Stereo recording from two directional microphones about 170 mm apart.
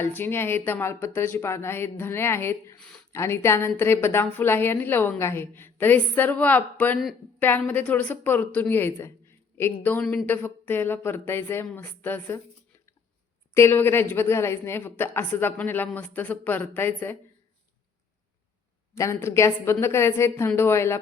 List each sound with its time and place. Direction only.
0.0 s a woman's voice: 10° left (ahead or behind)
13.5 s a woman's voice: 15° left (ahead or behind)
18.9 s a woman's voice: 15° left (ahead or behind)